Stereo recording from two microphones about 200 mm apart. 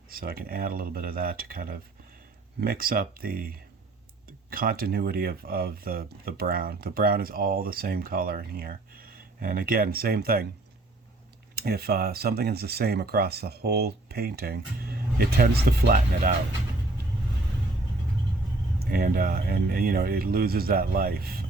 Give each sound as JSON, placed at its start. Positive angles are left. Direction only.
{"t": 0.1, "sound": "speech", "side_deg": -50}
{"t": 11.5, "sound": "speech", "side_deg": -50}
{"t": 18.9, "sound": "speech", "side_deg": -45}